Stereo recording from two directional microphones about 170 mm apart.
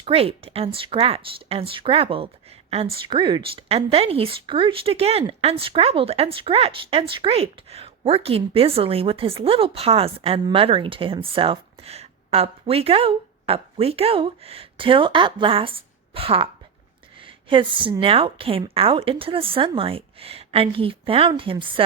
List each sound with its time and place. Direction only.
0.0 s speech: 35° right (ahead or behind)